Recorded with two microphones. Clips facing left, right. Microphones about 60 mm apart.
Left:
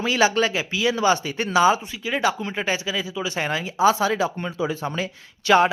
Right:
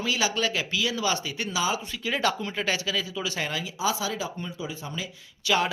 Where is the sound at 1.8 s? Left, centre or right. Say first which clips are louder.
Left 4 dB; centre.